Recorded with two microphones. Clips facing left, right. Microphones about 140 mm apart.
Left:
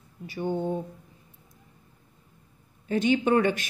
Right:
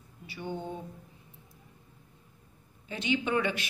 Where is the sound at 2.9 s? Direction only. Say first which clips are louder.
Left 8 dB; 45° left (ahead or behind).